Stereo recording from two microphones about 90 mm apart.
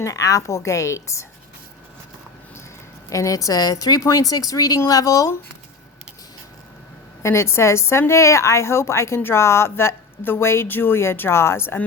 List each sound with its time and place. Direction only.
0.0 s a woman's voice: 40° left (ahead or behind)
3.1 s a woman's voice: 40° left (ahead or behind)
7.2 s speech: 30° left (ahead or behind)